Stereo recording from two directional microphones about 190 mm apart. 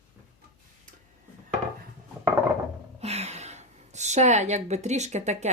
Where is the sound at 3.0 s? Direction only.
35° right (ahead or behind).